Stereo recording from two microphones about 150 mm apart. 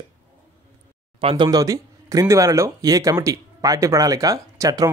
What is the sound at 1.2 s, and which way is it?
Speech, 40° right (ahead or behind).